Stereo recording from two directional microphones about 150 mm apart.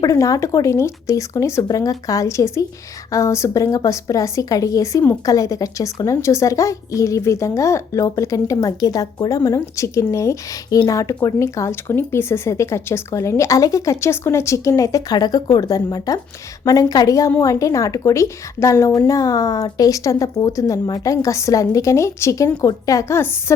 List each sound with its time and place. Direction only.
0.0 s a woman's voice: 20° left (ahead or behind)